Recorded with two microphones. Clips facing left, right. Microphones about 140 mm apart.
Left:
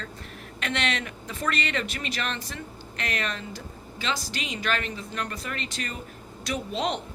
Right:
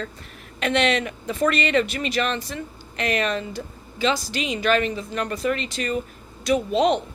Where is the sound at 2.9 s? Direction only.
15° right (ahead or behind).